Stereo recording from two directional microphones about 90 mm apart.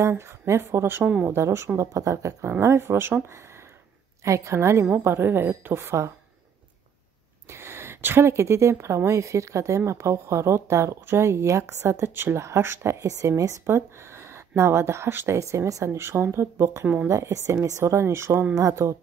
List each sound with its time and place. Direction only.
0.0 s a woman's voice: 30° right (ahead or behind)
1.0 s a woman's voice: 15° right (ahead or behind)
1.3 s a woman's voice: 30° right (ahead or behind)
4.2 s a woman's voice: 35° right (ahead or behind)
7.4 s speech: 30° right (ahead or behind)
16.8 s a woman's voice: 15° right (ahead or behind)
17.1 s speech: 35° right (ahead or behind)